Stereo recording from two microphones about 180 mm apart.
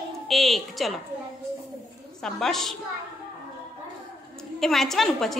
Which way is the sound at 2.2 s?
Centre (ahead or behind).